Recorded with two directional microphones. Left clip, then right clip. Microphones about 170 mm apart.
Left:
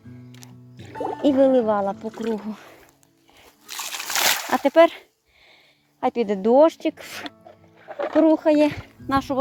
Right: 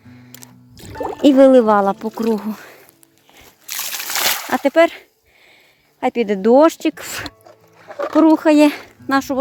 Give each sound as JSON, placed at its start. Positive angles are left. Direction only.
{"t": 0.8, "sound": "music", "side_deg": -25}
{"t": 1.1, "sound": "speech", "side_deg": -45}
{"t": 2.3, "sound": "speech", "side_deg": -40}
{"t": 3.7, "sound": "crunch", "side_deg": -30}
{"t": 4.1, "sound": "slosh", "side_deg": 0}
{"t": 4.5, "sound": "speech", "side_deg": -15}
{"t": 9.0, "sound": "speech", "side_deg": -30}